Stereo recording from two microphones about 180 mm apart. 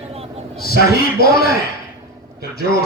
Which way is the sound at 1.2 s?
55° left (ahead or behind).